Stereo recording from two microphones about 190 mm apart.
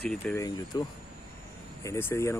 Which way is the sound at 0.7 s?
20° left (ahead or behind).